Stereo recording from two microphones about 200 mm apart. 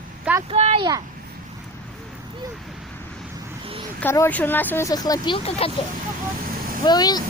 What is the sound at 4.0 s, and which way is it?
Speech, 10° left (ahead or behind).